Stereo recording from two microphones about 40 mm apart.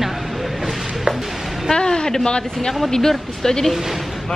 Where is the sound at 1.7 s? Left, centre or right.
Centre.